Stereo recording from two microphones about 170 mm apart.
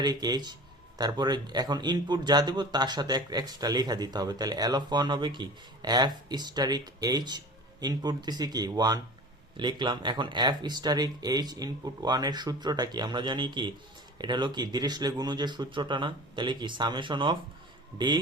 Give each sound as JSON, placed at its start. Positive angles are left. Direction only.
{"t": 0.0, "sound": "speech", "side_deg": -25}